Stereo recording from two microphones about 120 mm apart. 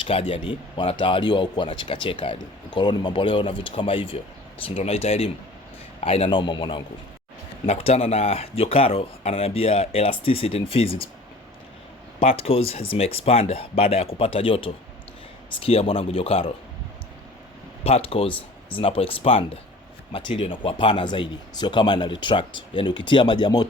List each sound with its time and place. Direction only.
0.0 s speech: 50° left (ahead or behind)
7.7 s speech: 55° left (ahead or behind)
12.2 s speech: 55° left (ahead or behind)
17.8 s speech: 55° left (ahead or behind); by 23.6 s 35° left (ahead or behind)